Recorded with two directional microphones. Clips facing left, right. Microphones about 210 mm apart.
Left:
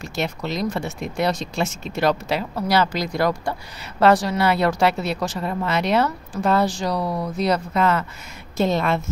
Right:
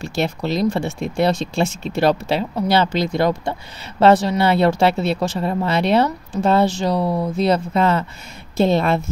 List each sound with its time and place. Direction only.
0.0 s speech: 30° right (ahead or behind)